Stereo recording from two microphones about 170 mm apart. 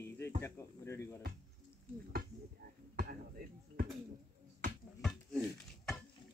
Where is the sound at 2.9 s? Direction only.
55° right (ahead or behind).